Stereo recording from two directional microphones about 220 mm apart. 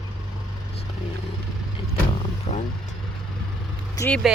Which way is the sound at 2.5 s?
25° left (ahead or behind).